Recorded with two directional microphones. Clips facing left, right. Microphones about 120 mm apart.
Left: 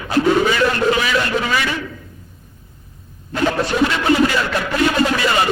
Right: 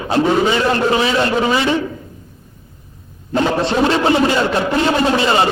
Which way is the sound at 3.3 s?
25° right (ahead or behind).